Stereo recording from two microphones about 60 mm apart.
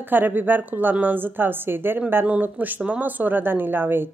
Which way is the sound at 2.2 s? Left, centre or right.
Right.